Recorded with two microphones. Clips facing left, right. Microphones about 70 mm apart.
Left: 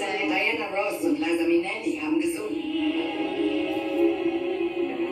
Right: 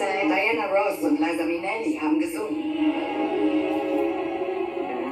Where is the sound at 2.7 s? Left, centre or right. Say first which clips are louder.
Right 2 dB; right.